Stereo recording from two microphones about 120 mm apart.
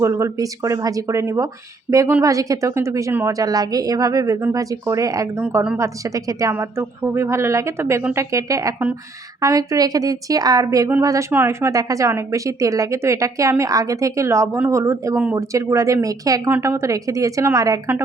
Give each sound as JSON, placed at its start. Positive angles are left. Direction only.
{"t": 0.0, "sound": "a woman's voice", "side_deg": -25}